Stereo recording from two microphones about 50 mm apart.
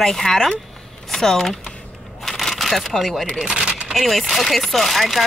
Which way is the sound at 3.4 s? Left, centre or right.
Centre.